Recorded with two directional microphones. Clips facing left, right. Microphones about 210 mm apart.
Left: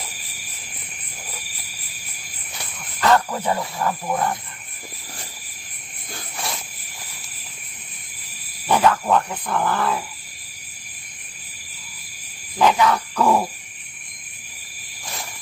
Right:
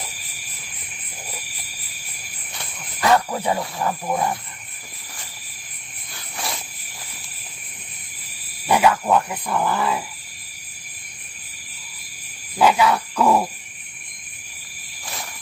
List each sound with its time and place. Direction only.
3.0 s speech: 10° right (ahead or behind)
6.3 s cricket: centre (ahead or behind)
8.6 s a sound: 10° right (ahead or behind)
12.5 s speech: 10° right (ahead or behind)